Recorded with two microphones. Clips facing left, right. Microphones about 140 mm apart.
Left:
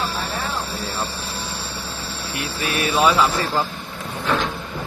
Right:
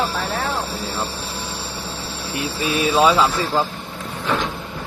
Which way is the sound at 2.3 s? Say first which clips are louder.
Right 4 dB; 20° right (ahead or behind).